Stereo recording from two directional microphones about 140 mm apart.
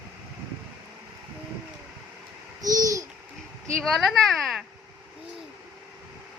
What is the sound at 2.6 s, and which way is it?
Babbling, 25° right (ahead or behind).